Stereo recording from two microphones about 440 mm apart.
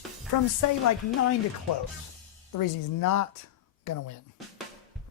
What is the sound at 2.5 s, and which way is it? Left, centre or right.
Speech, left.